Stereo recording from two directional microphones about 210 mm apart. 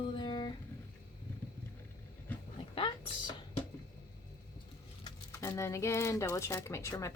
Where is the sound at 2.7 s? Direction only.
25° left (ahead or behind).